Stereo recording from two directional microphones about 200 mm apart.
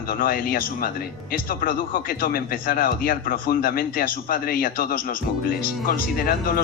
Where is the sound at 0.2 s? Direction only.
45° left (ahead or behind).